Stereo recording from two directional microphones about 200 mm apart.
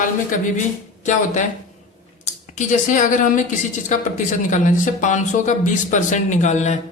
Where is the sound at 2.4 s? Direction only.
35° left (ahead or behind).